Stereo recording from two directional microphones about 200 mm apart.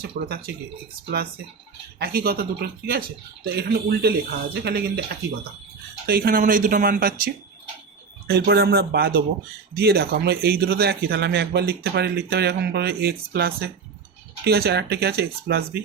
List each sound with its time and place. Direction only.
0.0 s speech: 50° right (ahead or behind)
2.0 s speech: 50° right (ahead or behind)
6.1 s speech: 50° right (ahead or behind)
8.3 s speech: 50° right (ahead or behind)